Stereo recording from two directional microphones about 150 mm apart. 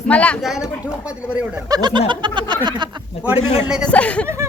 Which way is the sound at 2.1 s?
30° right (ahead or behind).